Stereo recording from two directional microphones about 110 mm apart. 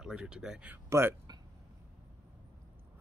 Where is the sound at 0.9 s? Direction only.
25° right (ahead or behind).